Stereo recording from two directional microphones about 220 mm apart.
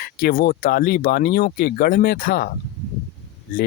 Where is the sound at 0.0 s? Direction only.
40° left (ahead or behind).